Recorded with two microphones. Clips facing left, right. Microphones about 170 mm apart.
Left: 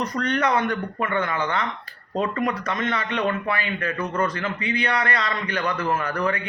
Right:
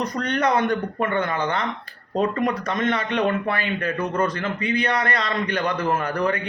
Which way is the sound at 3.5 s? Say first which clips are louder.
Right 2 dB; 40° right (ahead or behind).